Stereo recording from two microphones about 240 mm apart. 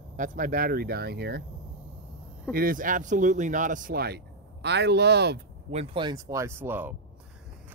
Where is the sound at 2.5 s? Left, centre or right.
Right.